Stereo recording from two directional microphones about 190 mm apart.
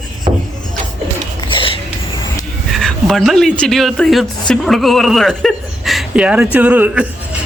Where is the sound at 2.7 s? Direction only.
Centre (ahead or behind).